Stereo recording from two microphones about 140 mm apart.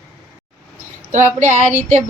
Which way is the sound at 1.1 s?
60° right (ahead or behind).